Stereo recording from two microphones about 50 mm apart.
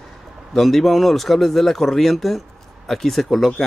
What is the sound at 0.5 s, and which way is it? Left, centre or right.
A man's voice, centre.